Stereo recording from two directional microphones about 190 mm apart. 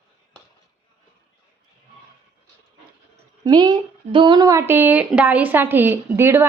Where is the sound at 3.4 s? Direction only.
20° right (ahead or behind).